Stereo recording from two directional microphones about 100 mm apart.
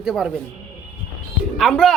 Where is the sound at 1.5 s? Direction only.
5° left (ahead or behind).